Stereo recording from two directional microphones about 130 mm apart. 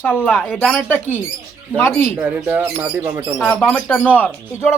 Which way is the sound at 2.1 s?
10° right (ahead or behind).